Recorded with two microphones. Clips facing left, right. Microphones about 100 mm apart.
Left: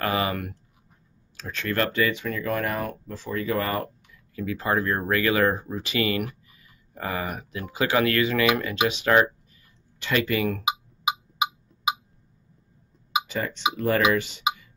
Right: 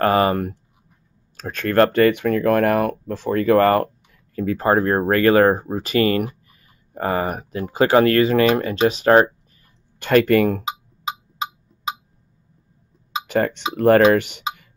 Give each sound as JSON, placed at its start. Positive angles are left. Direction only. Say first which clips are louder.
{"t": 0.0, "sound": "speech", "louder": "right 9 dB", "side_deg": -45}
{"t": 1.3, "sound": "speech", "louder": "right 9 dB", "side_deg": -50}
{"t": 9.9, "sound": "speech", "louder": "right 10 dB", "side_deg": -50}
{"t": 10.6, "sound": "a sound", "louder": "left 1 dB", "side_deg": 15}
{"t": 13.3, "sound": "speech", "louder": "right 7 dB", "side_deg": -55}